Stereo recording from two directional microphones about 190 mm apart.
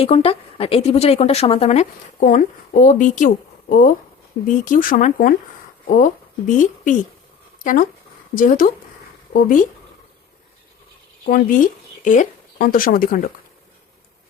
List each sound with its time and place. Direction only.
0.0 s speech: 30° left (ahead or behind)
6.5 s speech: 40° left (ahead or behind)
11.3 s speech: 45° left (ahead or behind)